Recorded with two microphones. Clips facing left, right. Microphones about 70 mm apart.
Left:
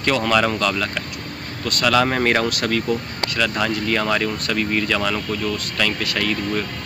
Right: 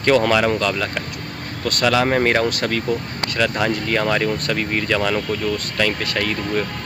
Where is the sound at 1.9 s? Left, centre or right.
Centre.